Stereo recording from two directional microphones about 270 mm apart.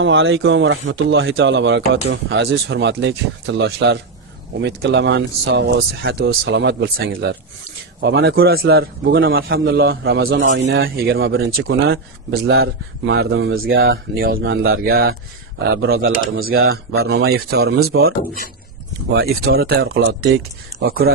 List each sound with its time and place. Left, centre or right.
0.0 s speech: right
19.1 s speech: right